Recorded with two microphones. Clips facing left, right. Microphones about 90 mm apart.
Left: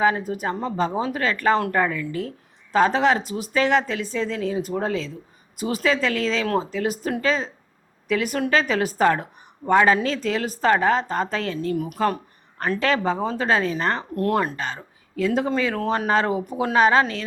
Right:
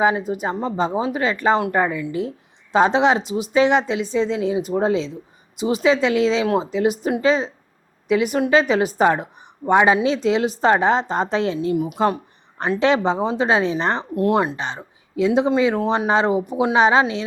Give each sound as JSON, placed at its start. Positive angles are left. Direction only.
{"t": 0.0, "sound": "speech", "side_deg": -15}